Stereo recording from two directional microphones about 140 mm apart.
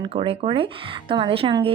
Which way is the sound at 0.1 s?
45° right (ahead or behind).